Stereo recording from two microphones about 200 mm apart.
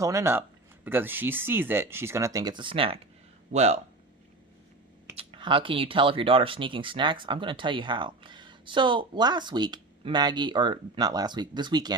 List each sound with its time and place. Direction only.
0.0 s speech: 15° right (ahead or behind); by 3.8 s 35° right (ahead or behind)
5.1 s speech: 25° right (ahead or behind)